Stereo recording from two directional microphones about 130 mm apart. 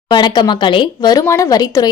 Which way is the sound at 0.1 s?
35° left (ahead or behind).